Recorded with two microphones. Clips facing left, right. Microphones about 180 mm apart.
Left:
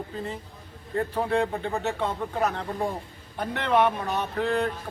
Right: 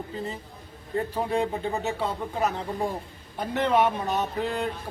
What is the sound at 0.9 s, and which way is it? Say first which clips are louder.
Speech: left 1 dB; 15° right (ahead or behind).